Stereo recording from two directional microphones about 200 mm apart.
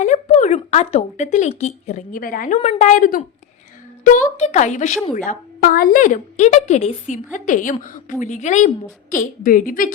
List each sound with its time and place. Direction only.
0.0 s speech: 35° left (ahead or behind)
2.6 s a woman's voice: 30° left (ahead or behind)